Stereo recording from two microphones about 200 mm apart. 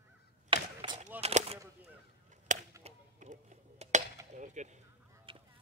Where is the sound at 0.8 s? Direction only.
30° right (ahead or behind).